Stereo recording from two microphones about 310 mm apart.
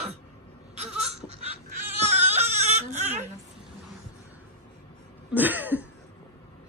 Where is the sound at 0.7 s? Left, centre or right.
Right.